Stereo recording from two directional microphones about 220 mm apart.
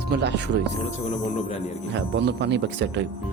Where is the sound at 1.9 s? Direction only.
50° right (ahead or behind).